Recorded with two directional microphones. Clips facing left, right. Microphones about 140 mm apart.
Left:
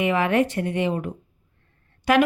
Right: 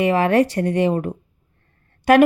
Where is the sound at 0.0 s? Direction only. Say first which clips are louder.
Right 4 dB; 35° right (ahead or behind).